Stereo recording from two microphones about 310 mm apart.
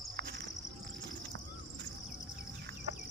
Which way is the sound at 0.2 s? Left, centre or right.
Right.